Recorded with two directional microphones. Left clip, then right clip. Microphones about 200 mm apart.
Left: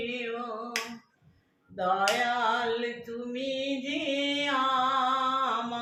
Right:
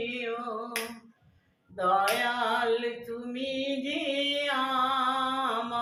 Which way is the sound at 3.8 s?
5° right (ahead or behind).